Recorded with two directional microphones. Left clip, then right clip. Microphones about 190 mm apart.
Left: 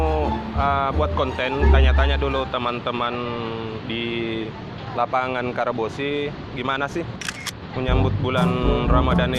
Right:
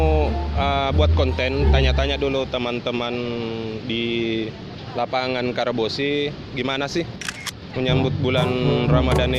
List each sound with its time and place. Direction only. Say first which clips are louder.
0.6 s speech: even; 55° right (ahead or behind)
4.9 s speech: left 1 dB; 45° right (ahead or behind)